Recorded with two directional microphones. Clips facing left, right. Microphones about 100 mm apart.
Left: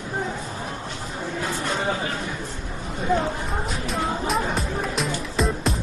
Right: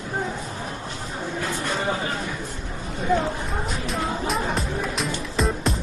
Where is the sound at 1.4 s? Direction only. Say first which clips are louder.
Left 1 dB; 15° left (ahead or behind).